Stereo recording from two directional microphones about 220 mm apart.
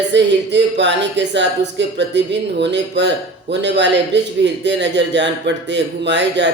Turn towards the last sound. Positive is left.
turn(degrees=-55)  # may be behind; listen again after turning